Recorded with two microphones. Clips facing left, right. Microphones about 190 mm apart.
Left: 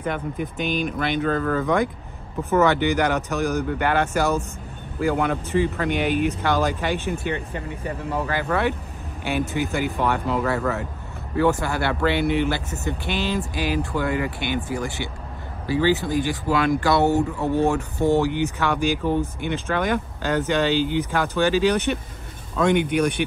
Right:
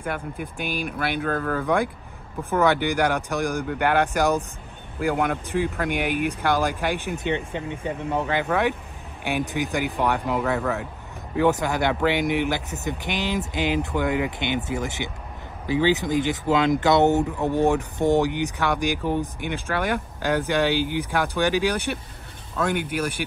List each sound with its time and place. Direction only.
0.0 s speech: 10° right (ahead or behind)
10.6 s speech: centre (ahead or behind)
11.3 s speech: 20° right (ahead or behind)